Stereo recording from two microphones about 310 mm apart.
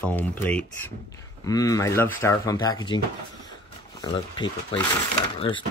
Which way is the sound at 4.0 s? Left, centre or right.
Centre.